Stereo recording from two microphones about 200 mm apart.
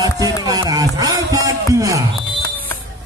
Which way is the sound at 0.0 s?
20° right (ahead or behind).